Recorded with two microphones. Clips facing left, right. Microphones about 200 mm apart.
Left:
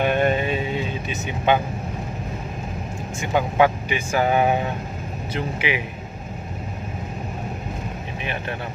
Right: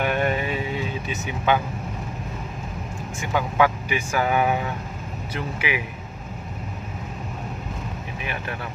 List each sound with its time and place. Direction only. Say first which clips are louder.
0.0 s vehicle: left 3 dB; 25° left (ahead or behind)
3.2 s speech: left 3 dB; 25° left (ahead or behind)